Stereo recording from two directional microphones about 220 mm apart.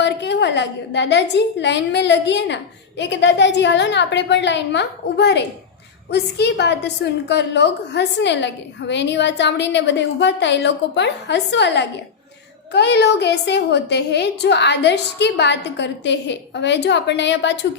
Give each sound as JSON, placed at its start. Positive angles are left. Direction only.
{"t": 0.0, "sound": "a woman's voice", "side_deg": 50}